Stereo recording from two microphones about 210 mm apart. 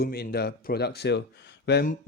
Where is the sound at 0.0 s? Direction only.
45° left (ahead or behind).